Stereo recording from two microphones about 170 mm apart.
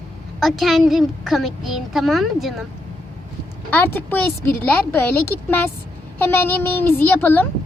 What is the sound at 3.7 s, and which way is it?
A child's voice, 10° left (ahead or behind).